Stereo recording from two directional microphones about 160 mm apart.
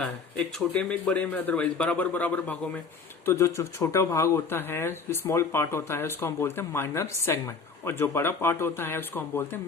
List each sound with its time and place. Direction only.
0.0 s speech: 5° left (ahead or behind)